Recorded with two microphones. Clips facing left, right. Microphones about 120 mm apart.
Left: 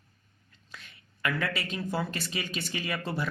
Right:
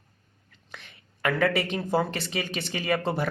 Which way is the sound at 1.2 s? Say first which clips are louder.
Right 7 dB; 55° right (ahead or behind).